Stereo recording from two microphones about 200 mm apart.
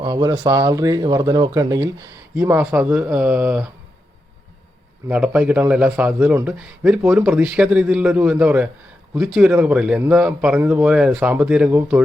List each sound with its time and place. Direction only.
0.0 s speech: 20° right (ahead or behind)
5.0 s speech: 5° right (ahead or behind)